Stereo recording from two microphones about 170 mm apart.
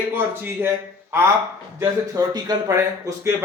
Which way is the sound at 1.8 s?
20° right (ahead or behind).